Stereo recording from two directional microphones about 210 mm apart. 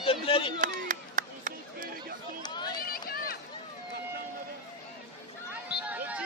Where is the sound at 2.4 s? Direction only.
20° left (ahead or behind).